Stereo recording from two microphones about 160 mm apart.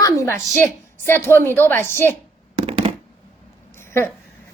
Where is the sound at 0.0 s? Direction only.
20° left (ahead or behind).